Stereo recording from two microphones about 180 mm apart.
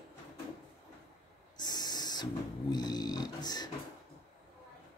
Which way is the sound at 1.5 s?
20° left (ahead or behind).